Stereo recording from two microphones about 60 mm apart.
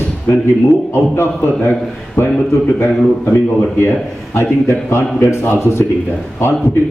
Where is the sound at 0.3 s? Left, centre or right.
Left.